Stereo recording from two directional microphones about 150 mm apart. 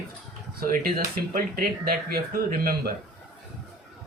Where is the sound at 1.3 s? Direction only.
80° right.